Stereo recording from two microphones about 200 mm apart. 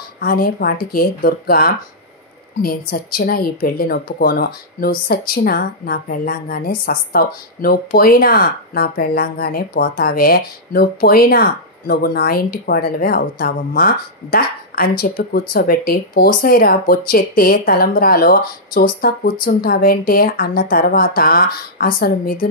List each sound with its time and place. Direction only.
0.2 s a woman's voice: 50° left (ahead or behind)